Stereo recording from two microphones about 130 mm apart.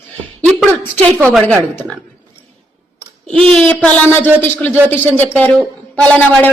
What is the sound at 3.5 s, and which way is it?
Speech, 10° left (ahead or behind).